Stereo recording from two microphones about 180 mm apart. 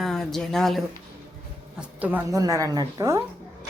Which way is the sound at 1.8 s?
10° right (ahead or behind).